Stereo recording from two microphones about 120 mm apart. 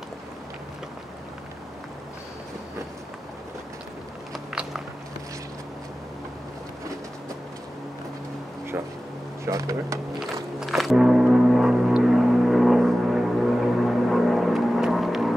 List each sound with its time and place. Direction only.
4.3 s biting: 5° right (ahead or behind)
9.4 s speech: 25° right (ahead or behind)
10.1 s music: centre (ahead or behind)